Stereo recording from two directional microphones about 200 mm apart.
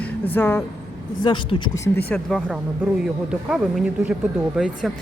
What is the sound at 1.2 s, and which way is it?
Speech, 25° left (ahead or behind).